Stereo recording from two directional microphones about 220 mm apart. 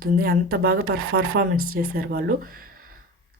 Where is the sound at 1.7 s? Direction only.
45° right (ahead or behind).